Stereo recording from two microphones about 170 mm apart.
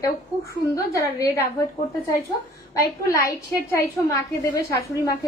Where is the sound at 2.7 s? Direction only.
20° left (ahead or behind).